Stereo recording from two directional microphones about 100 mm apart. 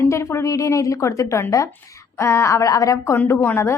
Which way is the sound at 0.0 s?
30° left (ahead or behind).